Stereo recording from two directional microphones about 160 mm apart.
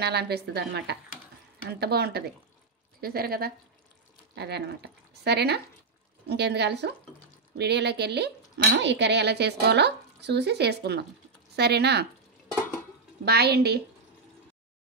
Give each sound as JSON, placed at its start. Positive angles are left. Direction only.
{"t": 0.0, "sound": "speech", "side_deg": -90}
{"t": 1.8, "sound": "speech", "side_deg": -75}
{"t": 4.4, "sound": "speech", "side_deg": -90}
{"t": 13.2, "sound": "a woman's voice", "side_deg": -90}